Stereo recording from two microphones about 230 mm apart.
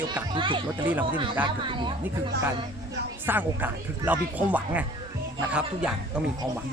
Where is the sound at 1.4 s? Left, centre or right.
Right.